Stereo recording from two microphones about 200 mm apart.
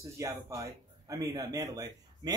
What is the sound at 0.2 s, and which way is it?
A man's voice, 15° right (ahead or behind).